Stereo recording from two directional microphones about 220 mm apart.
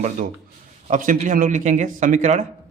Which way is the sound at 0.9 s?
35° right (ahead or behind).